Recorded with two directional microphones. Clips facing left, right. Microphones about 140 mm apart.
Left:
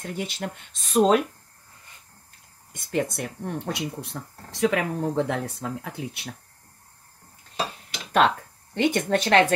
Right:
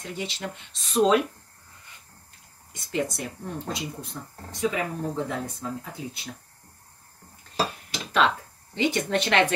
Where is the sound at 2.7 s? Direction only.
50° left (ahead or behind); by 4.2 s 70° left (ahead or behind).